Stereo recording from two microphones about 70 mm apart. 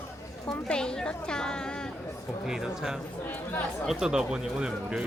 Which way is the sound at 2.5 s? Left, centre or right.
Centre.